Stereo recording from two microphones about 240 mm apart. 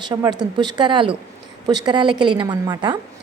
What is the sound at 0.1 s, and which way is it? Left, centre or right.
A woman's voice, centre.